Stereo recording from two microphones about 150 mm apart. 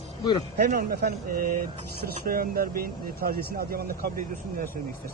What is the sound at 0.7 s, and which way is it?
Speech, 75° right (ahead or behind).